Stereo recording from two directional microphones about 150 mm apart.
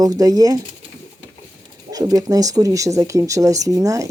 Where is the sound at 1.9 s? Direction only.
25° right (ahead or behind).